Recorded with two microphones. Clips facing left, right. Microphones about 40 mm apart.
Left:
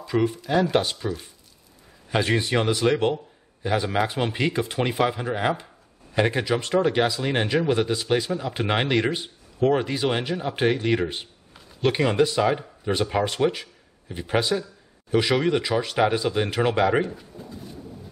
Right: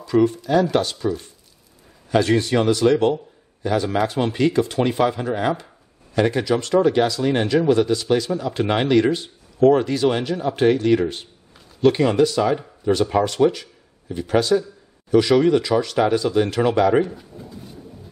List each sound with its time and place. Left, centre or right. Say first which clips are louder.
0.0 s speech: right 6 dB; centre
2.0 s speech: right 5 dB; centre